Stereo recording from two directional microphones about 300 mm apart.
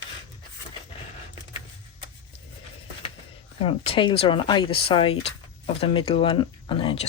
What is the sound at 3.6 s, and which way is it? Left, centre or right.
Speech, centre.